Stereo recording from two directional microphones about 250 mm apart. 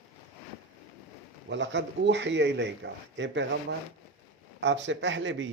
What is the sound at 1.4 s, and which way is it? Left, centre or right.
Speech, right.